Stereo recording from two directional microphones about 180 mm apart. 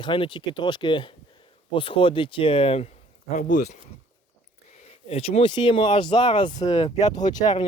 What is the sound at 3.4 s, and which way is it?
Speech, 55° left (ahead or behind).